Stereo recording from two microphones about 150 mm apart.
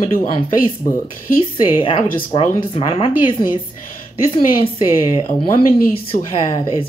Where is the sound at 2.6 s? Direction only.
40° left (ahead or behind).